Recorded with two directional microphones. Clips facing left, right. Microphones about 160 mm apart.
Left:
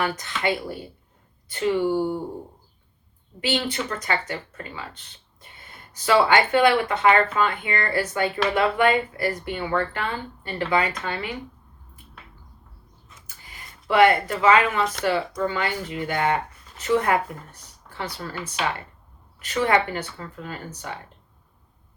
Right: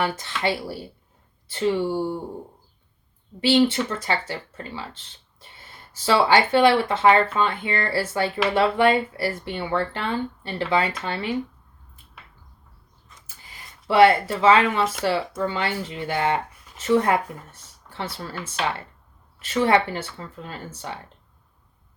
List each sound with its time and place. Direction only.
0.0 s a woman's voice: 30° right (ahead or behind)
3.4 s speech: 25° right (ahead or behind)
5.9 s speech: 30° right (ahead or behind)
13.8 s speech: 30° right (ahead or behind)